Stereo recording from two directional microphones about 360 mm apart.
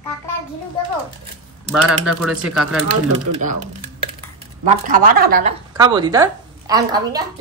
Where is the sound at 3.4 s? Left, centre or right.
Right.